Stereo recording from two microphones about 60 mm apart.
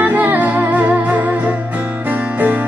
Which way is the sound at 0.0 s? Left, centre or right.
Right.